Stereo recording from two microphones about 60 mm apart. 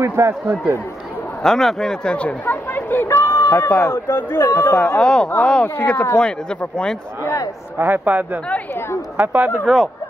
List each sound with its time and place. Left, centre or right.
0.0 s speech: right
1.4 s speech: centre
2.0 s speech: left
3.2 s a sound: left
3.5 s speech: left
4.7 s speech: left
5.0 s speech: centre
7.8 s speech: right